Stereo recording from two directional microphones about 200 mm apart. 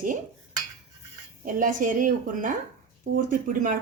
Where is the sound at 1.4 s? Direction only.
40° right (ahead or behind).